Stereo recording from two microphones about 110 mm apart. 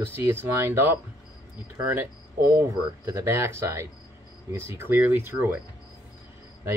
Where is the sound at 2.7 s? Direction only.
30° right (ahead or behind).